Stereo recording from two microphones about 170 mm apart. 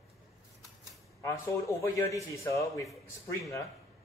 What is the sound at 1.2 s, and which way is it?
A man's voice, 15° left (ahead or behind).